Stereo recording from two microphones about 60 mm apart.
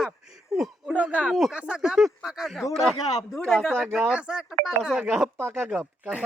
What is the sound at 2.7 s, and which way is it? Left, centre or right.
Speech, centre.